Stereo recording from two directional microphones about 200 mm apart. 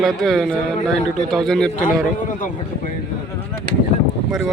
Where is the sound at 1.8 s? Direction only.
40° left (ahead or behind).